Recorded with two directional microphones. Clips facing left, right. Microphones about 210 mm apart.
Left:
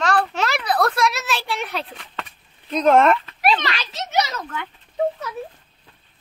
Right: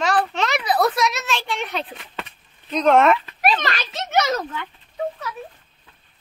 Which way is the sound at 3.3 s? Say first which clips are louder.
Even; 45° right (ahead or behind).